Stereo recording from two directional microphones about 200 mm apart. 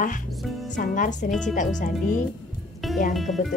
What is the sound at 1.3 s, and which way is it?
Speech, centre (ahead or behind).